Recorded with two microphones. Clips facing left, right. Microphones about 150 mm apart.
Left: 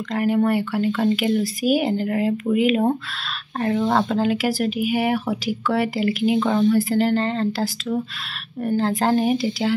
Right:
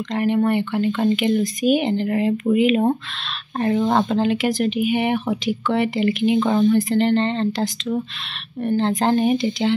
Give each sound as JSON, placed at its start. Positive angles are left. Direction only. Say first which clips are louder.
{"t": 0.1, "sound": "speech", "louder": "even", "side_deg": 5}